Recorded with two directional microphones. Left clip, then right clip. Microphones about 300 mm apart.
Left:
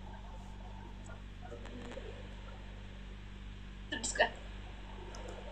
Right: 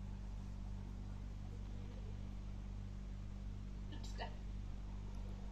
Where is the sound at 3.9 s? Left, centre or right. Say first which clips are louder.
Left 19 dB; left.